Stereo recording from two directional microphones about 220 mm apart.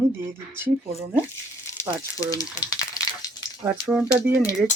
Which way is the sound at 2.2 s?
15° left (ahead or behind).